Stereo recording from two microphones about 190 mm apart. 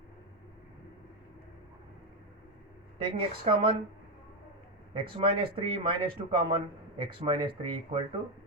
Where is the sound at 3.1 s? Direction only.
30° right (ahead or behind).